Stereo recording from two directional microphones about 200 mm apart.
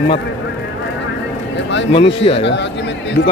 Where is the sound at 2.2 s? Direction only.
30° left (ahead or behind).